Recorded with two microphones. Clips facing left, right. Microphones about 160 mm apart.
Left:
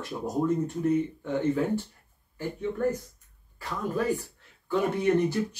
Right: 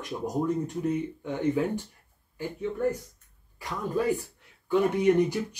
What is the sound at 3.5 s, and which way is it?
Speech, 15° right (ahead or behind).